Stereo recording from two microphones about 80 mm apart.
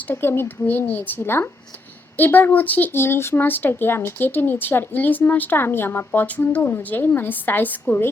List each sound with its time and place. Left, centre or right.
0.1 s speech: left